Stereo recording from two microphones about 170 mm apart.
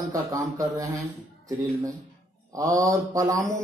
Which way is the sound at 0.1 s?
20° right (ahead or behind).